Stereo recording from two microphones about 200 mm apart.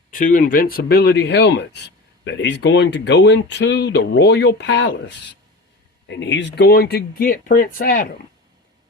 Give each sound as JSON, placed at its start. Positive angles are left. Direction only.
{"t": 0.1, "sound": "speech", "side_deg": 40}